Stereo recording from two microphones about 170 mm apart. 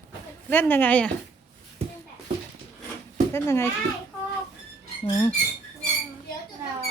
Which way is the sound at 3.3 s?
15° left (ahead or behind).